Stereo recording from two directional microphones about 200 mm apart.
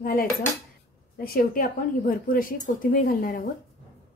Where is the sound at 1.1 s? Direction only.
50° left (ahead or behind).